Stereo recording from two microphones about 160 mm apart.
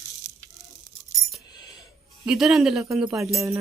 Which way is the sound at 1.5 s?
25° left (ahead or behind).